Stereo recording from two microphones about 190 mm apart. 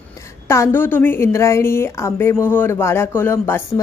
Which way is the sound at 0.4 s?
15° left (ahead or behind).